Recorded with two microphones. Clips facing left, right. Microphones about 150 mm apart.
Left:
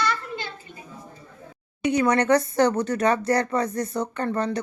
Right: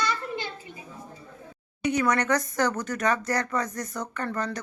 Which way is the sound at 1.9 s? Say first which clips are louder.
Left 4 dB; 30° left (ahead or behind).